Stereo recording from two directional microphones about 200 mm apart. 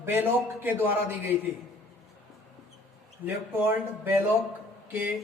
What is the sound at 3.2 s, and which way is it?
Speech, 10° right (ahead or behind).